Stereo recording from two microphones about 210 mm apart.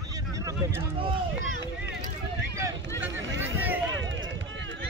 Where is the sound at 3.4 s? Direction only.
10° right (ahead or behind).